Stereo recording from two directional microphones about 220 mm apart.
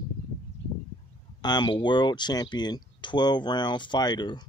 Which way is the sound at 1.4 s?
20° left (ahead or behind).